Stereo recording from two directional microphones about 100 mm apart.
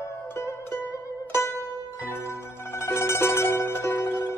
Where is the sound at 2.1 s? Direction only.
25° left (ahead or behind).